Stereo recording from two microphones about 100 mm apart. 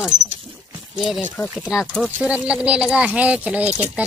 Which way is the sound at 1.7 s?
5° right (ahead or behind).